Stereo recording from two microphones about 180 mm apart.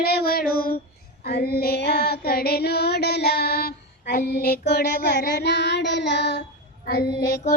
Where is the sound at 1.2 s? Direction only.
60° left (ahead or behind).